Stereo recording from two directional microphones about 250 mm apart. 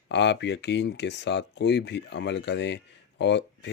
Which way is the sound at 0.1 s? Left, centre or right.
Left.